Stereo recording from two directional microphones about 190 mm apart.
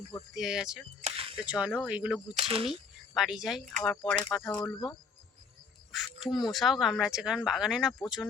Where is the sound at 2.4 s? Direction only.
30° right (ahead or behind).